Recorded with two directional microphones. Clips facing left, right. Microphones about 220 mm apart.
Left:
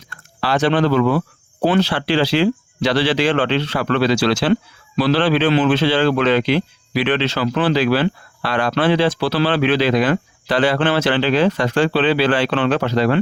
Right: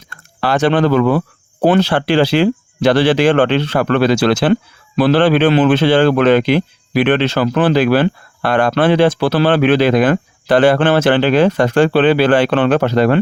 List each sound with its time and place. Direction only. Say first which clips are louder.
0.4 s speech: right 3 dB; 50° right (ahead or behind)